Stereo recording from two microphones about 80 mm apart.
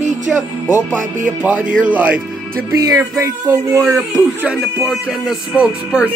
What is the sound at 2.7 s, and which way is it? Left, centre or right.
Speech, right.